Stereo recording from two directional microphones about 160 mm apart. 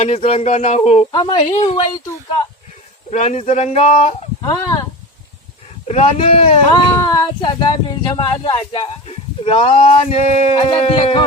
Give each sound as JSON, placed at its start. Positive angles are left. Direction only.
{"t": 0.0, "sound": "speech", "side_deg": 40}
{"t": 1.1, "sound": "speech", "side_deg": 30}
{"t": 3.1, "sound": "speech", "side_deg": 45}
{"t": 4.4, "sound": "speech", "side_deg": 20}
{"t": 5.9, "sound": "speech", "side_deg": 40}